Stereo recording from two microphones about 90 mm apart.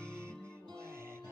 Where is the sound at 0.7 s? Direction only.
30° right (ahead or behind).